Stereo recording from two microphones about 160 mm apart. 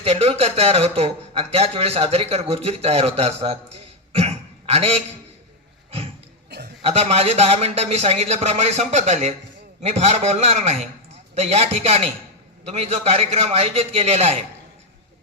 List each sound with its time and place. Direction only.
0.0 s a man's voice: 40° right (ahead or behind)
6.8 s a man's voice: 40° right (ahead or behind)